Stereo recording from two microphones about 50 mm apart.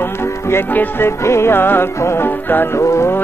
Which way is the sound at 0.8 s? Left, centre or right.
Left.